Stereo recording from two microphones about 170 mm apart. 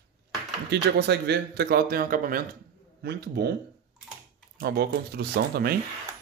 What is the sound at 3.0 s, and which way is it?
Speech, 70° right (ahead or behind).